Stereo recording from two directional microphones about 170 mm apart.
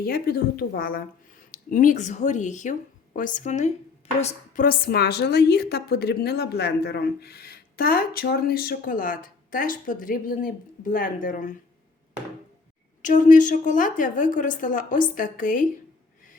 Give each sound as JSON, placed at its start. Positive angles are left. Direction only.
{"t": 0.0, "sound": "a woman's voice", "side_deg": 60}
{"t": 4.6, "sound": "a woman's voice", "side_deg": 65}
{"t": 13.0, "sound": "a woman's voice", "side_deg": 50}